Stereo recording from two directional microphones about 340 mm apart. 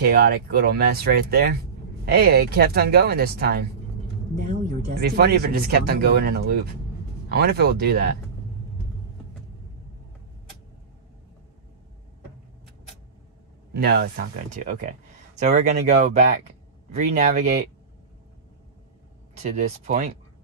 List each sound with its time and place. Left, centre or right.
0.0 s speech: right
5.0 s speech: right
13.7 s speech: right
19.4 s speech: centre